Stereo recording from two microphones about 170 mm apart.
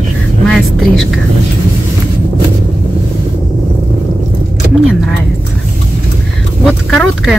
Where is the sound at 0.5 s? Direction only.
Centre (ahead or behind).